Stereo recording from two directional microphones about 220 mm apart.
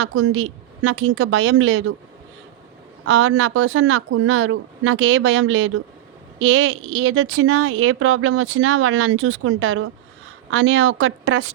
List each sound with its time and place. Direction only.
0.0 s speech: 65° right (ahead or behind)
3.1 s speech: 65° right (ahead or behind)